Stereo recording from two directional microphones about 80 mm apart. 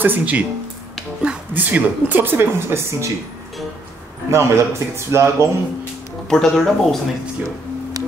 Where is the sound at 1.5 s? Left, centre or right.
Right.